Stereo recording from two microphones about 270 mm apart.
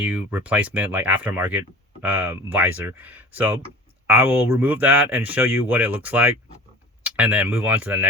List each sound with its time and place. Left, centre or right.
0.0 s speech: centre